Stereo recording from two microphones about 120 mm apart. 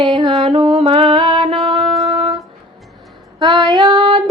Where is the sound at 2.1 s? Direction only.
50° right (ahead or behind).